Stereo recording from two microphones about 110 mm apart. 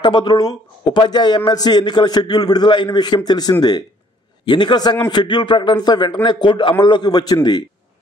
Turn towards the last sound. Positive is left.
turn(degrees=40)  # may be behind; listen again after turning